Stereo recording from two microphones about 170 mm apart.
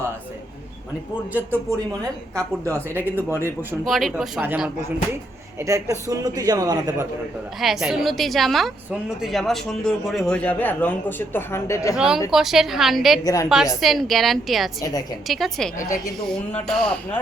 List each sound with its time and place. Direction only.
1.3 s speech: 10° right (ahead or behind)
2.9 s speech: 10° left (ahead or behind)
3.2 s speech: 15° right (ahead or behind)
3.8 s a woman's voice: centre (ahead or behind); by 7.1 s 20° right (ahead or behind)
7.6 s a woman's voice: centre (ahead or behind); by 11.9 s 15° left (ahead or behind)
11.9 s a woman's voice: 5° right (ahead or behind)
13.2 s a woman's voice: 20° left (ahead or behind)
13.8 s a woman's voice: centre (ahead or behind)
14.8 s a woman's voice: 20° left (ahead or behind)
15.3 s a woman's voice: centre (ahead or behind)